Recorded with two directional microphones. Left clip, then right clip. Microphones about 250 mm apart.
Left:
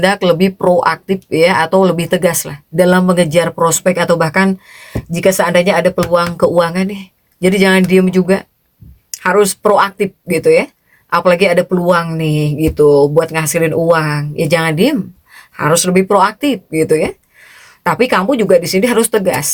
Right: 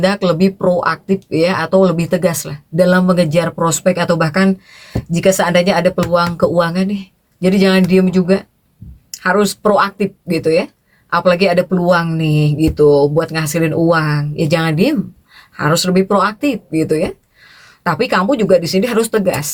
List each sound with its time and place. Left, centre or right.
0.0 s speech: left